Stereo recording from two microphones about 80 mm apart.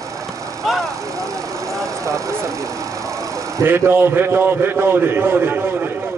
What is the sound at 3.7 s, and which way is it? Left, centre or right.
A man's voice, right.